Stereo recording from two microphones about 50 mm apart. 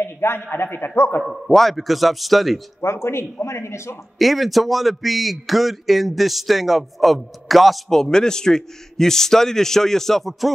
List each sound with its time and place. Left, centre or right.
0.0 s a man's voice: left
1.2 s a man's voice: centre
2.8 s speech: left
4.2 s a man's voice: centre
8.0 s a man's voice: centre